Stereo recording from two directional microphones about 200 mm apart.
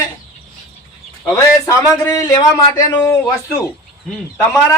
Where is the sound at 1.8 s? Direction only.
15° left (ahead or behind).